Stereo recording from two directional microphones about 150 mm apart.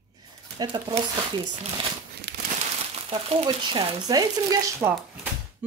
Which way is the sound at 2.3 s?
90° right.